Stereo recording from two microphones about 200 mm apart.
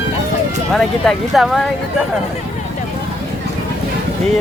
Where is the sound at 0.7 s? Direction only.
Centre (ahead or behind).